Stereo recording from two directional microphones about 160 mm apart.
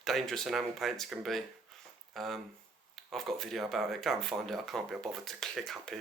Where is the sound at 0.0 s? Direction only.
Centre (ahead or behind).